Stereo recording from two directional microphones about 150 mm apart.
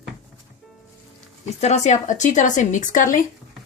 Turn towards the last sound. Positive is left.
turn(degrees=60)  # may be behind; listen again after turning